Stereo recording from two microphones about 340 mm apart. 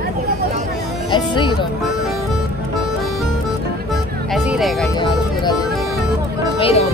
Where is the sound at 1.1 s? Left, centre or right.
Centre.